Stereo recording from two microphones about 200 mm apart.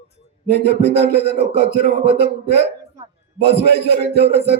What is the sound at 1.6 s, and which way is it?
Music, 50° right (ahead or behind).